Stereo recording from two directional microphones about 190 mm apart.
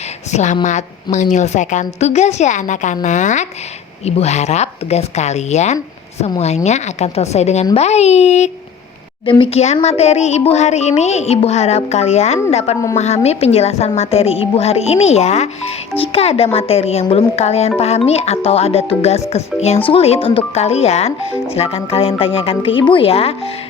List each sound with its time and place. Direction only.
0.3 s a woman's voice: 40° left (ahead or behind)